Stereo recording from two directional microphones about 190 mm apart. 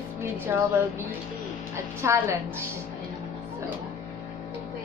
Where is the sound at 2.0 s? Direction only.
15° right (ahead or behind).